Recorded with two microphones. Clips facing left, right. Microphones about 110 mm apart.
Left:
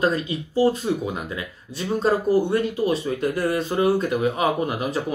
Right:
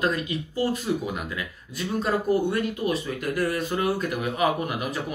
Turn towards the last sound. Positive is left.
turn(degrees=30)  # may be behind; listen again after turning